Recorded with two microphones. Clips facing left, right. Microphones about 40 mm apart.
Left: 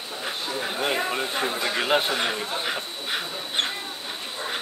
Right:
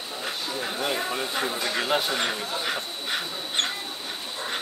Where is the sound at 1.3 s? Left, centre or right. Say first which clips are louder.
Left 1 dB; centre.